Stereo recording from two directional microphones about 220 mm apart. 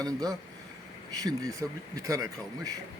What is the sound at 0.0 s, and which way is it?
A man's voice, 15° right (ahead or behind).